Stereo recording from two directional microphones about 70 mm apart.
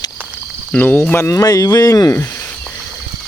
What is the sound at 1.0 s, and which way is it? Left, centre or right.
Speech, left.